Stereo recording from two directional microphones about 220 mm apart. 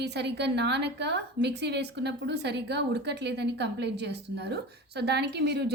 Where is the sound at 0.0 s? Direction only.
50° right (ahead or behind).